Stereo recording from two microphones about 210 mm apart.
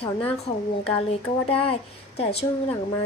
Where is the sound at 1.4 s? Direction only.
25° left (ahead or behind).